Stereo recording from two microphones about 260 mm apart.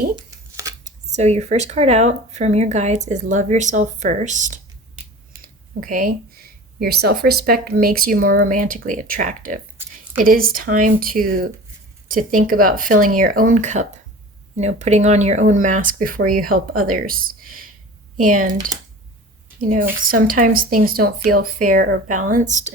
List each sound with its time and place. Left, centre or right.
0.9 s speech: right
5.3 s a sound: right
6.7 s a woman's voice: right